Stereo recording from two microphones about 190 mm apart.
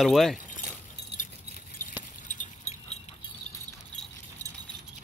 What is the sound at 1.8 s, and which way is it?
Keys jangling, 45° left (ahead or behind).